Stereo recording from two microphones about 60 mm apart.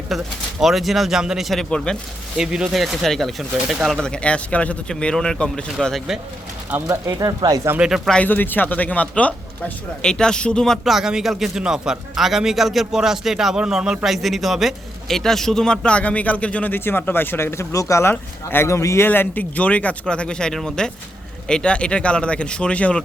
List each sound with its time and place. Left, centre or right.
0.1 s a man's voice: centre
1.7 s speech: centre
2.4 s speech: centre
2.7 s a man's voice: centre
3.9 s speech: centre
6.7 s speech: right
7.1 s speech: right
7.8 s speech: centre
8.2 s speech: left
10.1 s speech: centre
10.8 s a man's voice: centre; by 16.7 s left
16.7 s speech: left
18.1 s speech: left
19.0 s speech: left; by 23.0 s centre